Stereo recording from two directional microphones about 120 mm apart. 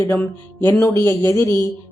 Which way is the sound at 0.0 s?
15° left (ahead or behind).